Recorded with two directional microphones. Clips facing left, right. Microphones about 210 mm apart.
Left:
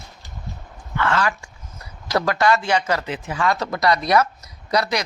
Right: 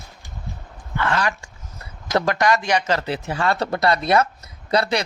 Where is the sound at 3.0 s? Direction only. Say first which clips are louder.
Right 1 dB; 35° right (ahead or behind).